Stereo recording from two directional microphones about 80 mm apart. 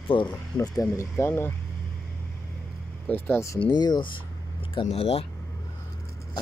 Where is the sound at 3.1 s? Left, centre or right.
Left.